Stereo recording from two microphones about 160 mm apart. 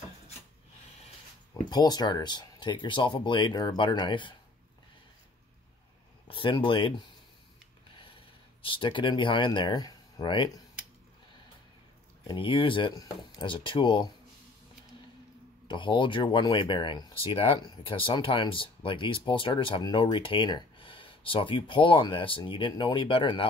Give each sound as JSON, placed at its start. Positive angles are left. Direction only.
{"t": 1.7, "sound": "speech", "side_deg": 25}
{"t": 6.2, "sound": "speech", "side_deg": 30}
{"t": 8.6, "sound": "speech", "side_deg": 30}
{"t": 12.3, "sound": "speech", "side_deg": 30}
{"t": 15.7, "sound": "speech", "side_deg": 30}